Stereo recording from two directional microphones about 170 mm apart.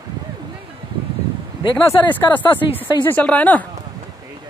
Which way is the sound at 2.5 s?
30° left (ahead or behind).